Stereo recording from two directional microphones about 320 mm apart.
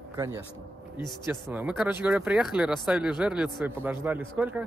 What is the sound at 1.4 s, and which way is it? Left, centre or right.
Speech, centre.